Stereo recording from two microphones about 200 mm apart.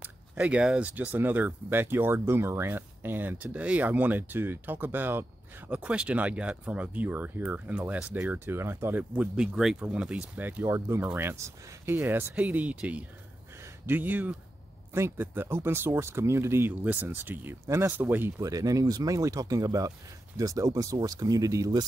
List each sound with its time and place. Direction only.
0.0 s speech: 5° right (ahead or behind)